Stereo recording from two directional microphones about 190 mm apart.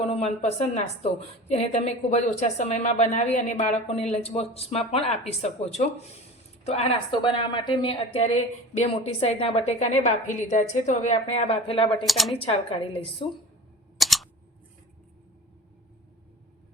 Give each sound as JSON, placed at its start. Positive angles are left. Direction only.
{"t": 0.0, "sound": "a woman's voice", "side_deg": 35}
{"t": 12.0, "sound": "speech", "side_deg": 0}
{"t": 12.3, "sound": "a woman's voice", "side_deg": 30}
{"t": 14.0, "sound": "a sound", "side_deg": 0}